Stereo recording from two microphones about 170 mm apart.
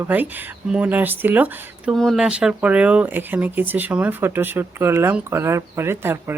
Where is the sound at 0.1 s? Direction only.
10° right (ahead or behind).